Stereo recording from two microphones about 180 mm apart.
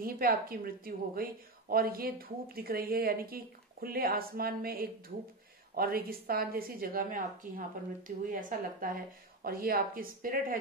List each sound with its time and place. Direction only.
0.0 s a woman's voice: 55° right (ahead or behind)